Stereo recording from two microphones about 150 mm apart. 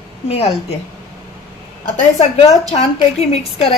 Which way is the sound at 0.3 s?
45° left (ahead or behind).